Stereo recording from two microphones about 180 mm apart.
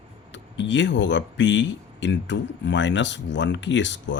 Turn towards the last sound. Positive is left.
turn(degrees=90)